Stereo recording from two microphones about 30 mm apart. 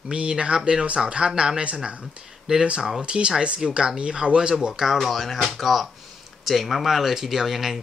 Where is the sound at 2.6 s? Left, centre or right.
Right.